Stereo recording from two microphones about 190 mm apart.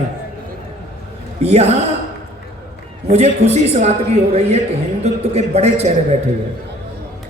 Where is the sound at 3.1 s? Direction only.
35° right (ahead or behind).